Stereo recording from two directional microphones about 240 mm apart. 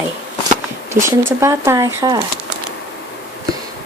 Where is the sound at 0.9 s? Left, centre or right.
Centre.